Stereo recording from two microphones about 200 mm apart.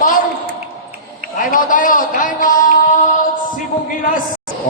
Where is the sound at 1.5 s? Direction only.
40° left (ahead or behind).